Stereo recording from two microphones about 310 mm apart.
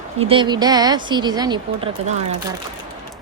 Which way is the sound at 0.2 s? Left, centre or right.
Centre.